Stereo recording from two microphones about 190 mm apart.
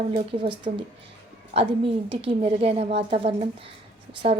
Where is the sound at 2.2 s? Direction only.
30° right (ahead or behind).